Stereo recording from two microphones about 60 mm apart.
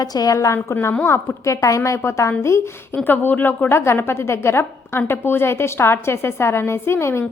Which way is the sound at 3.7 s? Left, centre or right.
Left.